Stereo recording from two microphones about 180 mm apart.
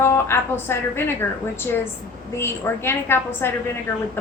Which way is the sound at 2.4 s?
15° left (ahead or behind).